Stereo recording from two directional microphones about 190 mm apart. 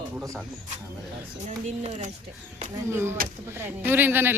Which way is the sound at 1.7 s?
35° right (ahead or behind).